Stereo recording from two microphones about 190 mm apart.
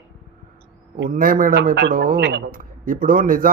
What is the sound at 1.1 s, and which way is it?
Speech, 45° right (ahead or behind).